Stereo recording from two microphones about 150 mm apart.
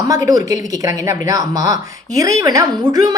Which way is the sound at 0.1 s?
25° right (ahead or behind).